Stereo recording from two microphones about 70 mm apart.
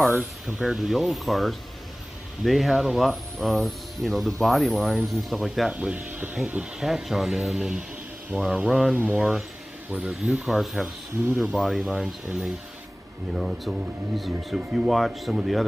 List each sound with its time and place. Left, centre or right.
0.6 s speech: centre
5.7 s speech: centre
6.6 s speech: centre
8.9 s speech: right
10.0 s speech: centre
13.3 s speech: centre